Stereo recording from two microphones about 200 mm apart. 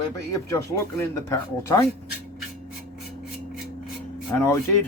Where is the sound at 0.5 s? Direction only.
15° left (ahead or behind).